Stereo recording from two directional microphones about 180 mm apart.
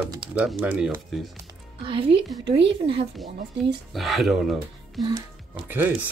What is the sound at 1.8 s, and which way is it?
Speech, 30° right (ahead or behind).